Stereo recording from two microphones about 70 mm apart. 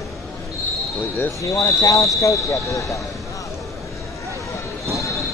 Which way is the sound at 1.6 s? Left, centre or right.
Left.